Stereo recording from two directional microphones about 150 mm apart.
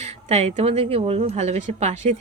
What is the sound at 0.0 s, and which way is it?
A woman's voice, 45° right (ahead or behind).